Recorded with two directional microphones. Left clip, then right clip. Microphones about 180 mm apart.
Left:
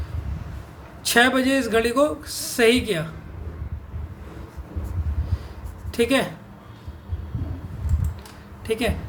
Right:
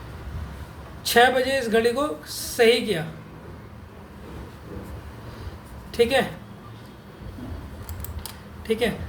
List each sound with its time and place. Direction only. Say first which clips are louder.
1.0 s a man's voice: even; 50° left (ahead or behind)
5.9 s a woman's voice: right 1 dB; 45° left (ahead or behind)
8.6 s speech: right 1 dB; 45° left (ahead or behind)